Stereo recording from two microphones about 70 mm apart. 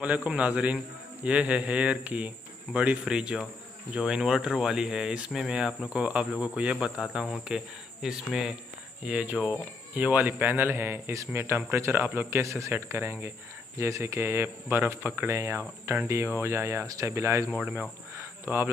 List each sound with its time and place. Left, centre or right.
0.0 s a man's voice: right
9.0 s speech: centre
10.5 s speech: right
12.7 s speech: right
13.7 s speech: right
18.4 s speech: right